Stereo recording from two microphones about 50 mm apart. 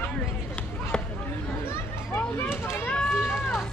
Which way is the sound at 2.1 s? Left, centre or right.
Left.